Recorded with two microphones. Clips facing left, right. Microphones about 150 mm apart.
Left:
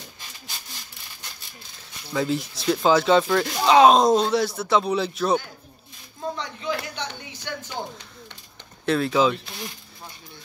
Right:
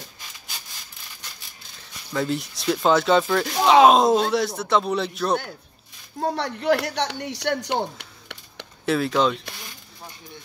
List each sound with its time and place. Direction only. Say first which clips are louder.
2.1 s speech: left 1 dB; centre (ahead or behind)
6.2 s speech: right 7 dB; 70° right (ahead or behind)
8.8 s speech: even; centre (ahead or behind)